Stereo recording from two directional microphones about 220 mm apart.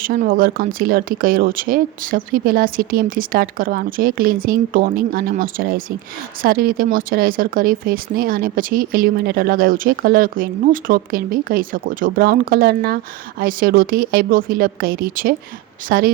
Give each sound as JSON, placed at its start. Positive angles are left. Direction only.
{"t": 0.0, "sound": "speech", "side_deg": -40}